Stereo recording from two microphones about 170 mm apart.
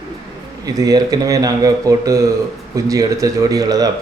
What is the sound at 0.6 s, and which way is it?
Speech, 20° right (ahead or behind).